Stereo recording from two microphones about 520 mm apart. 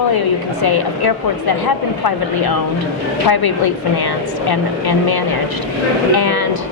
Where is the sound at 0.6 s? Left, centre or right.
Left.